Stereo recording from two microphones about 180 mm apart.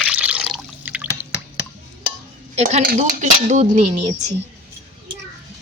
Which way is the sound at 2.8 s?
50° right (ahead or behind).